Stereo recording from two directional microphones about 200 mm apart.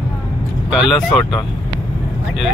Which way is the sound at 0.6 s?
Centre (ahead or behind).